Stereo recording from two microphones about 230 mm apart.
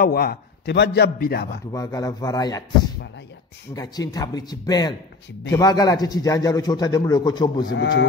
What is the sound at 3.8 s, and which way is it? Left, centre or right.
Speech, centre.